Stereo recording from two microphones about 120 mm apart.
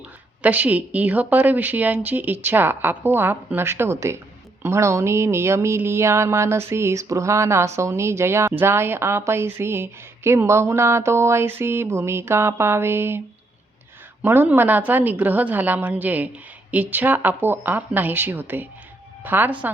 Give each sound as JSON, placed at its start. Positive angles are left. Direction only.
{"t": 0.4, "sound": "speech", "side_deg": -15}
{"t": 4.6, "sound": "a sound", "side_deg": -25}
{"t": 14.2, "sound": "speech", "side_deg": -15}